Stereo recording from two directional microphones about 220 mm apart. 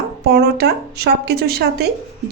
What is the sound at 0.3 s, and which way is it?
Speech, 45° right (ahead or behind).